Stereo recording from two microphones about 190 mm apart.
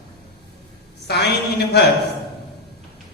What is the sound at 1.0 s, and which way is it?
Speech, 60° left (ahead or behind).